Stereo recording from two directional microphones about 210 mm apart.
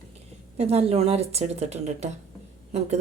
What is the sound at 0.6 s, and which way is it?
Speech, 30° right (ahead or behind).